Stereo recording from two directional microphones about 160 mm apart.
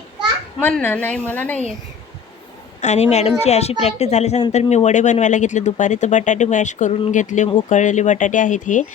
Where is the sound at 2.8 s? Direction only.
45° left (ahead or behind).